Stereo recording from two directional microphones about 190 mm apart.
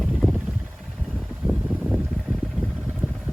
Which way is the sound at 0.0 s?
Centre (ahead or behind).